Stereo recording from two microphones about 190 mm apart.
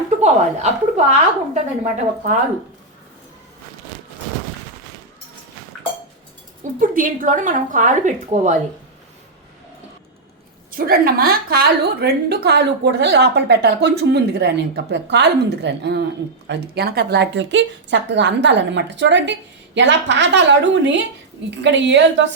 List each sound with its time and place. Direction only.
0.2 s a woman's voice: 35° right (ahead or behind)
6.6 s a woman's voice: 45° right (ahead or behind)
10.8 s a woman's voice: 50° right (ahead or behind); by 22.3 s 70° right (ahead or behind)